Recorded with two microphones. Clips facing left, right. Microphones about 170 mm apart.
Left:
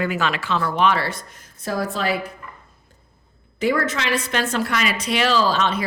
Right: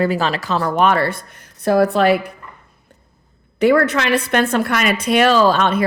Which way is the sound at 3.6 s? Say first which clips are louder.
Right 7 dB; 65° right (ahead or behind).